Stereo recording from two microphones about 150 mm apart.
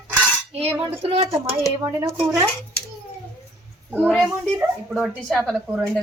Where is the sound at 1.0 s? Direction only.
40° right (ahead or behind).